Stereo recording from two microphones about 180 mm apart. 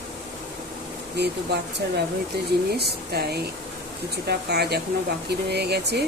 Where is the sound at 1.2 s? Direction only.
70° right (ahead or behind).